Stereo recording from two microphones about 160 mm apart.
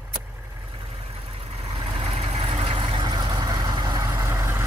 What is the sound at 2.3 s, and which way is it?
Vehicle, 35° right (ahead or behind).